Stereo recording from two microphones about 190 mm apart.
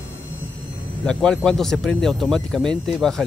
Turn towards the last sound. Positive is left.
turn(degrees=5)  # may be behind; listen again after turning